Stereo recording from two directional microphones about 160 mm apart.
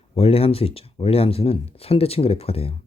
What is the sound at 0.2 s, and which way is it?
Speech, 35° left (ahead or behind).